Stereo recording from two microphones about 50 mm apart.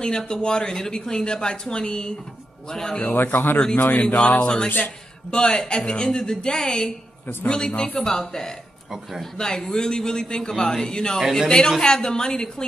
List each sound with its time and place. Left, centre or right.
0.0 s speech: centre
3.0 s a man's voice: left
3.5 s speech: left
4.6 s a man's voice: left
5.3 s speech: centre
11.1 s speech: centre
11.4 s speech: centre